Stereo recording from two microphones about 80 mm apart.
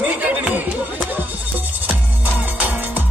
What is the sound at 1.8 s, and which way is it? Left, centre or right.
Music, right.